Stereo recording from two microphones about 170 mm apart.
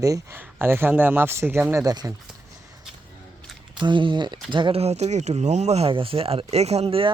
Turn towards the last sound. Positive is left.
turn(degrees=-35)  # may be behind; listen again after turning